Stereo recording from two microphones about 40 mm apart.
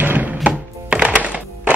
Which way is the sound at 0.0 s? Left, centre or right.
Right.